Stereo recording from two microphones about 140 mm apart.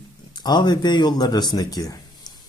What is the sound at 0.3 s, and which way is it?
Speech, 30° left (ahead or behind).